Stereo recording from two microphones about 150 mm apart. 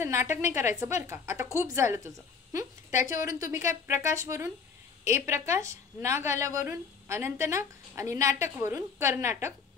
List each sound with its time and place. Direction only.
0.0 s a woman's voice: 20° right (ahead or behind)